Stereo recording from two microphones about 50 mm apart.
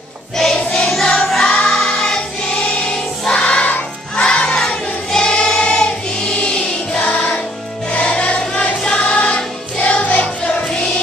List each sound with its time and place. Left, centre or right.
0.7 s choir: centre
7.0 s music: left; by 10.9 s centre